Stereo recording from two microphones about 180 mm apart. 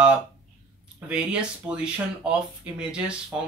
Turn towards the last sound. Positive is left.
turn(degrees=-10)  # may be behind; listen again after turning